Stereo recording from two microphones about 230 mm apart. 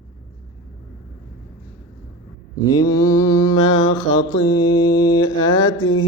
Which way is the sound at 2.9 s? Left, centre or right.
Centre.